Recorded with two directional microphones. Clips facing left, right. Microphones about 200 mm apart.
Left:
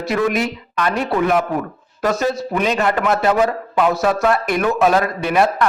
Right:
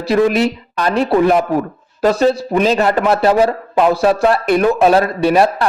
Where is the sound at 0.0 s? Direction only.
30° right (ahead or behind).